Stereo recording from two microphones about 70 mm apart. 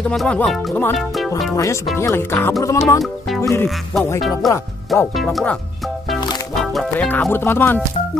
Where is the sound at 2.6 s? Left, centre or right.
Left.